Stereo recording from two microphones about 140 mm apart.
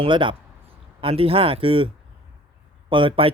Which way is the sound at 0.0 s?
35° right (ahead or behind).